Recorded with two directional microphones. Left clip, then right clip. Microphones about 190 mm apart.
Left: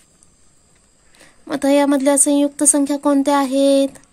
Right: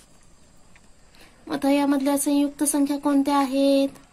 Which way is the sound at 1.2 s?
60° left (ahead or behind).